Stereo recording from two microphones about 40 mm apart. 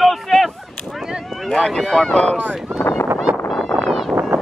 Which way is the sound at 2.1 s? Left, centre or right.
Left.